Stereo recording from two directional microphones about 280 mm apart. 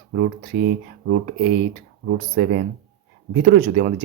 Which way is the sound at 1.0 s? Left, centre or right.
Right.